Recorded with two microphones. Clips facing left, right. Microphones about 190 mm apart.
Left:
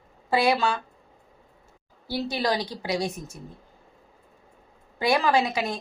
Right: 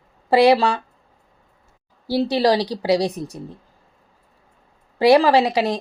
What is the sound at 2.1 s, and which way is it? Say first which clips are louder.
Speech: right 9 dB; 35° right (ahead or behind).